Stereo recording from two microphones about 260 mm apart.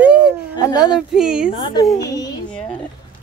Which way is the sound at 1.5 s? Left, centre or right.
Centre.